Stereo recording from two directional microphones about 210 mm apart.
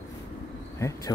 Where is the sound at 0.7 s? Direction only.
15° left (ahead or behind).